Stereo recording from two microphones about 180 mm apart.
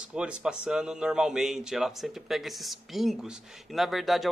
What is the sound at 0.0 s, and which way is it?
A man's voice, 5° right (ahead or behind).